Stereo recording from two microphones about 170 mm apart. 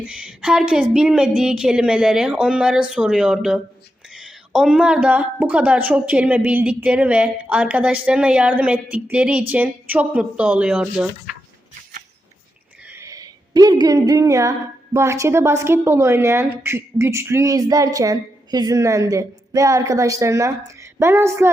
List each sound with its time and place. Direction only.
0.0 s a woman's voice: 5° right (ahead or behind)
12.9 s a sound: 15° right (ahead or behind)
14.9 s a woman's voice: 15° right (ahead or behind)